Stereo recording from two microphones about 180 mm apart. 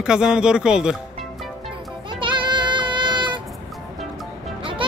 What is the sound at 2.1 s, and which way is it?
Child singing, 25° right (ahead or behind).